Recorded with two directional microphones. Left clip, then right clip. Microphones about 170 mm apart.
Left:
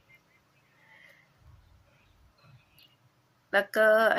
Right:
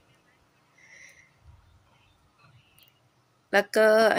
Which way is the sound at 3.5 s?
40° right (ahead or behind).